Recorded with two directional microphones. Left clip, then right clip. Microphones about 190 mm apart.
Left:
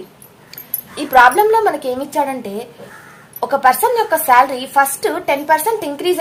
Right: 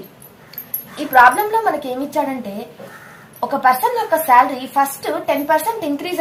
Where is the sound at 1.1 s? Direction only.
60° left (ahead or behind).